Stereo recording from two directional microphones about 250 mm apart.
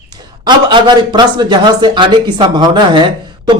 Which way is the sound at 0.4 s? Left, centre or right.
Centre.